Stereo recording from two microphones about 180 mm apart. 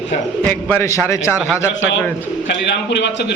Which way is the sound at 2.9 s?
70° left (ahead or behind).